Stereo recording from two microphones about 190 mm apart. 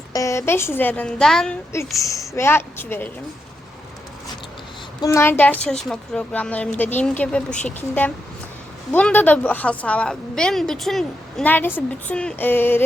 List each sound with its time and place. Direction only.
0.1 s a woman's voice: 15° left (ahead or behind)
2.0 s a woman's voice: 15° left (ahead or behind)
4.9 s a woman's voice: 15° left (ahead or behind)